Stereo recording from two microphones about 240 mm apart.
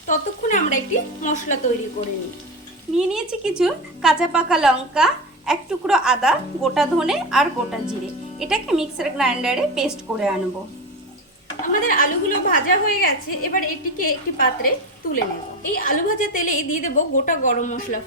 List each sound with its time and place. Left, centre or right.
0.1 s a woman's voice: left
2.9 s a woman's voice: centre
11.6 s a woman's voice: left